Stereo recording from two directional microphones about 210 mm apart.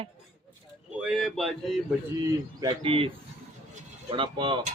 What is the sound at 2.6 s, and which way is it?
Speech, 25° right (ahead or behind).